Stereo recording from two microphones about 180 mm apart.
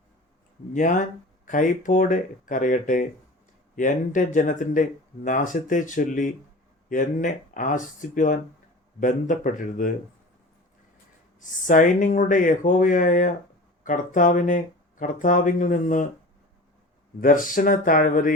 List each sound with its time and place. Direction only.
0.7 s speech: 45° left (ahead or behind)
11.3 s speech: 45° left (ahead or behind)
17.2 s speech: 50° left (ahead or behind)